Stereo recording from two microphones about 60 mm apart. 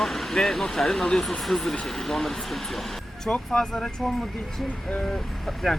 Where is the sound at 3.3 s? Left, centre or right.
Centre.